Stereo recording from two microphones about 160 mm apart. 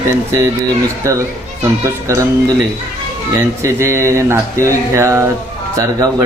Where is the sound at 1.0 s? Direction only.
20° right (ahead or behind).